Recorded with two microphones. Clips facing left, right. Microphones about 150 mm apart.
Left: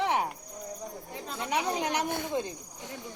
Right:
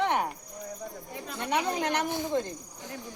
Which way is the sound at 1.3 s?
10° left (ahead or behind).